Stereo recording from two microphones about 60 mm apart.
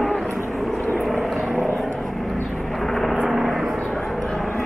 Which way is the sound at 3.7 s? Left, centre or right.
Centre.